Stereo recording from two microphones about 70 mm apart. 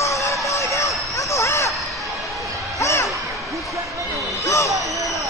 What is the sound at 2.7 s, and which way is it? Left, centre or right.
Basketball bounce, left.